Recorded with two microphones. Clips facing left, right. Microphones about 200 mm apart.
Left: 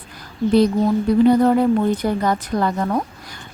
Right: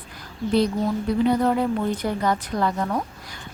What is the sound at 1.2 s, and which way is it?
Speech, 45° left (ahead or behind).